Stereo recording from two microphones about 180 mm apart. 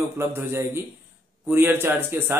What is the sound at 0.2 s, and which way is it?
A man's voice, 15° right (ahead or behind).